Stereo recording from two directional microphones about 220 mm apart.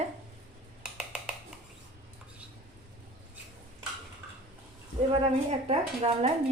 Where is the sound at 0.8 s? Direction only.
5° right (ahead or behind).